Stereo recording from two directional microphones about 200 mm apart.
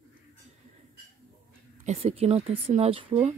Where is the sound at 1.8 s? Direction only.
30° right (ahead or behind).